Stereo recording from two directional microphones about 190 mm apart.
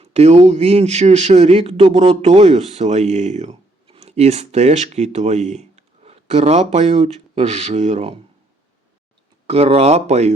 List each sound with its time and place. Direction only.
0.0 s a man's voice: 35° right (ahead or behind)
9.5 s a man's voice: 30° right (ahead or behind)